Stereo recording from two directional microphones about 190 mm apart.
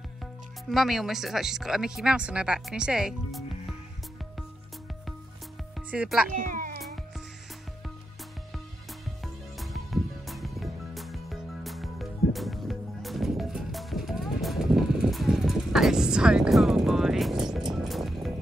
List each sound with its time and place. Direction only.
0.2 s speech: centre (ahead or behind)
5.8 s speech: 5° right (ahead or behind)
6.3 s speech: 45° right (ahead or behind)
9.2 s music: centre (ahead or behind)